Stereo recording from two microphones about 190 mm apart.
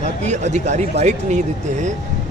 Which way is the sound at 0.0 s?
35° right (ahead or behind).